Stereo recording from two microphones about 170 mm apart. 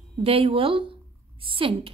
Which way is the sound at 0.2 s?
35° right (ahead or behind).